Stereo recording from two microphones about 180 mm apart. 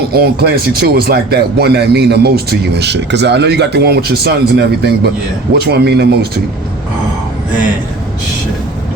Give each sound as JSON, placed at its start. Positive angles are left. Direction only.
{"t": 0.1, "sound": "speech", "side_deg": -60}